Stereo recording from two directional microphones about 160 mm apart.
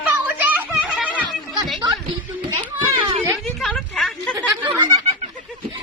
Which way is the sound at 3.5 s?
5° left (ahead or behind).